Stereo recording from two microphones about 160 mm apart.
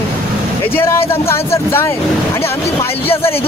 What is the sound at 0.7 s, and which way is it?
Speech, 15° left (ahead or behind).